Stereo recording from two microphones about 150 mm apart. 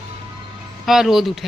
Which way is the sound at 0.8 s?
Centre (ahead or behind).